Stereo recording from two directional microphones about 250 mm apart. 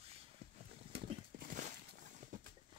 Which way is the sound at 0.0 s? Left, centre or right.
Right.